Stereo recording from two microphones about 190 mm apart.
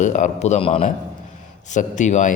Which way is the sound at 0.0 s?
40° left (ahead or behind).